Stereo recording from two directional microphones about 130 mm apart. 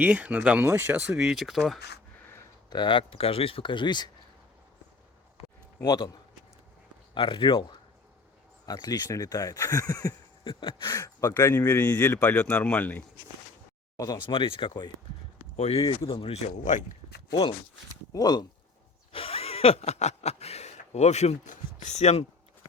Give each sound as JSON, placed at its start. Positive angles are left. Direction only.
{"t": 0.0, "sound": "speech", "side_deg": -10}
{"t": 2.6, "sound": "speech", "side_deg": 35}
{"t": 5.8, "sound": "speech", "side_deg": 35}
{"t": 7.1, "sound": "speech", "side_deg": 40}
{"t": 10.6, "sound": "speech", "side_deg": 40}
{"t": 10.9, "sound": "speech", "side_deg": 20}
{"t": 13.9, "sound": "speech", "side_deg": 25}
{"t": 14.2, "sound": "speech", "side_deg": 40}
{"t": 15.5, "sound": "speech", "side_deg": 50}
{"t": 16.5, "sound": "speech", "side_deg": 70}
{"t": 18.1, "sound": "speech", "side_deg": 30}
{"t": 19.1, "sound": "speech", "side_deg": 45}